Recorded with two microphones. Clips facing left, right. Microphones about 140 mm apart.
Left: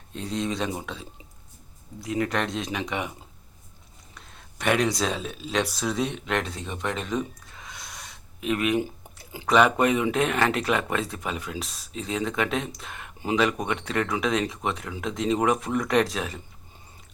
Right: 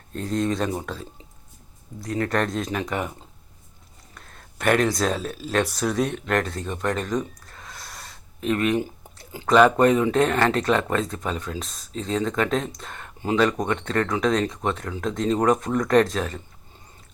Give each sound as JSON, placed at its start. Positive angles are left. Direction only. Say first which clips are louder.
{"t": 0.3, "sound": "speech", "louder": "right 4 dB", "side_deg": 0}
{"t": 2.1, "sound": "speech", "louder": "right 3 dB", "side_deg": 5}
{"t": 4.6, "sound": "speech", "louder": "right 3 dB", "side_deg": 0}
{"t": 7.9, "sound": "gasp", "louder": "right 1 dB", "side_deg": 0}
{"t": 9.5, "sound": "speech", "louder": "right 4 dB", "side_deg": 5}